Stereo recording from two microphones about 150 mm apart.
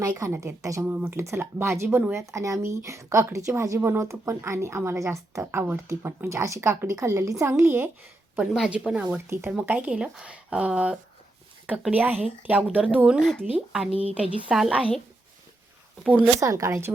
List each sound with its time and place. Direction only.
0.1 s speech: 20° right (ahead or behind)
8.4 s speech: 5° right (ahead or behind)
13.9 s a woman's voice: 40° right (ahead or behind)
14.4 s speech: 5° right (ahead or behind)
16.4 s speech: 20° right (ahead or behind)